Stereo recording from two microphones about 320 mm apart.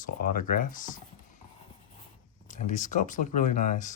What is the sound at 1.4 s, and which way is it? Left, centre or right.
Clip-clop, centre.